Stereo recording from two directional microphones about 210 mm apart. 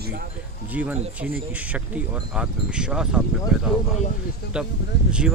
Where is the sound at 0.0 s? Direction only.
50° right (ahead or behind).